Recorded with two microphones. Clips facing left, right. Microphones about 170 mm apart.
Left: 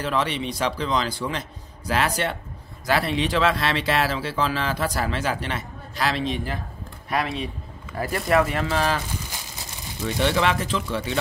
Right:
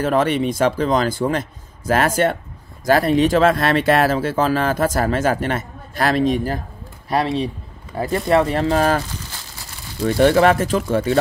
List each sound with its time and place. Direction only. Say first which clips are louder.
0.0 s speech: right 8 dB; 50° right (ahead or behind)
8.0 s speech: right 4 dB; 25° right (ahead or behind); by 9.0 s 45° right (ahead or behind)
10.0 s speech: right 9 dB; 45° right (ahead or behind)